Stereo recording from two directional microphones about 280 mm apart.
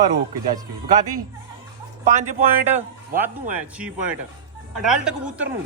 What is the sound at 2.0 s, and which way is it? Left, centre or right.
Speech, right.